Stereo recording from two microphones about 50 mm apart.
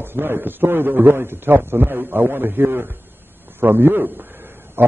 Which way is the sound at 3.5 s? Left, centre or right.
Right.